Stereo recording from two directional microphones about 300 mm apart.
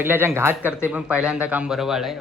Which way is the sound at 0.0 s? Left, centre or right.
Centre.